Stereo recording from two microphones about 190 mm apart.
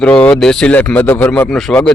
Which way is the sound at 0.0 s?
5° left (ahead or behind).